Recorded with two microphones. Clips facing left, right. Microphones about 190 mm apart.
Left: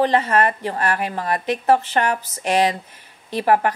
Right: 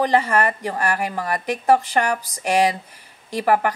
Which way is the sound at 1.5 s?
10° right (ahead or behind).